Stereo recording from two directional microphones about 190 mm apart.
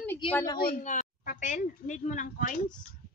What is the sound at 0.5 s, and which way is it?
Speech, 50° left (ahead or behind).